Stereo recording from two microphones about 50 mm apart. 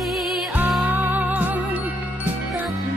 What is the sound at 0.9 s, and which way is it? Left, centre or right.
Music, right.